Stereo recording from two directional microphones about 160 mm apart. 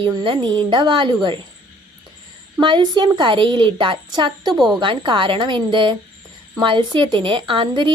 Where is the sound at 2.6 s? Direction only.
30° right (ahead or behind).